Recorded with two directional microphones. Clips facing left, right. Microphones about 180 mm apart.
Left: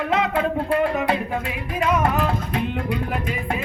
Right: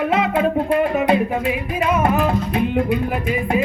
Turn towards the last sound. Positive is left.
turn(degrees=-10)  # may be behind; listen again after turning